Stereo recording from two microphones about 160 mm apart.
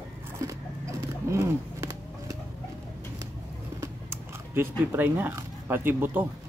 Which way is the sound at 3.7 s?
15° right (ahead or behind).